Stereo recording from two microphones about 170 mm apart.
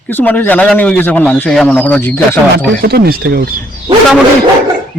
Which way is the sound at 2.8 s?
65° right (ahead or behind).